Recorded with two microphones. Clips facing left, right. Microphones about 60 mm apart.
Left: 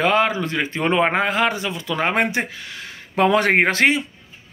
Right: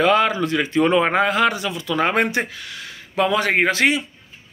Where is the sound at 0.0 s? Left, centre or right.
Left.